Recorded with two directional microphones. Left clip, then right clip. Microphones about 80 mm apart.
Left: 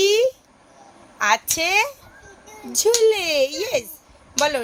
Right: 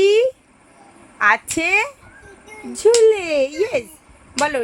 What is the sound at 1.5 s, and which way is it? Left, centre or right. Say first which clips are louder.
Speech: right 2 dB; left.